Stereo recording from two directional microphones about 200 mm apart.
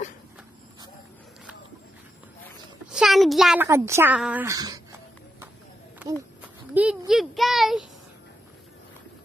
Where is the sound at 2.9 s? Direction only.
Centre (ahead or behind).